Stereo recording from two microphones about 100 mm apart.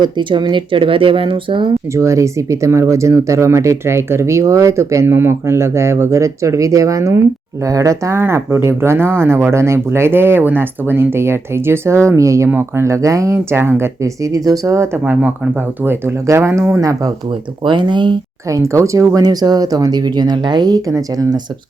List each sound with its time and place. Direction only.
0.0 s speech: 50° right (ahead or behind)
1.9 s speech: 30° right (ahead or behind)
15.0 s speech: 15° right (ahead or behind); by 17.1 s 30° right (ahead or behind)
17.6 s speech: 50° right (ahead or behind)
18.4 s speech: 30° right (ahead or behind)